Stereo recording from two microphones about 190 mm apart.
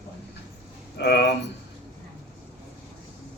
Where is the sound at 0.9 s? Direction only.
60° left (ahead or behind).